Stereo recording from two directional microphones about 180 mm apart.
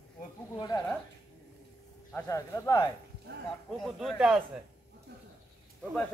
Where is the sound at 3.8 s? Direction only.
Centre (ahead or behind).